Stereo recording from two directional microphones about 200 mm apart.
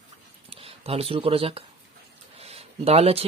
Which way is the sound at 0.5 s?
30° right (ahead or behind).